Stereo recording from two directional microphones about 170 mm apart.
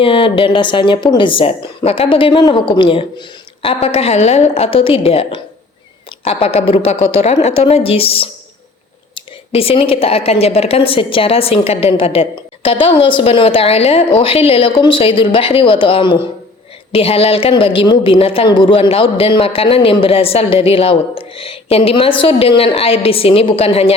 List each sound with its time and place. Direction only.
0.0 s speech: 30° left (ahead or behind)